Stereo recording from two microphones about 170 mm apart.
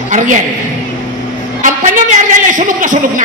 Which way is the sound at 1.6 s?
50° right (ahead or behind).